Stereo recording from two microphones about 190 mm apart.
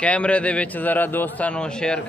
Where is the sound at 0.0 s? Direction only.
5° left (ahead or behind).